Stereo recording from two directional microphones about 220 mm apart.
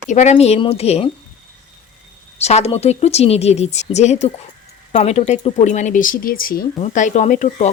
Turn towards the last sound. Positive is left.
turn(degrees=35)  # may be behind; listen again after turning